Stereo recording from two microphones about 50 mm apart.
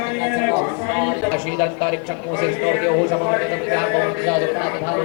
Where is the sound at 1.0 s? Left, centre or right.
Right.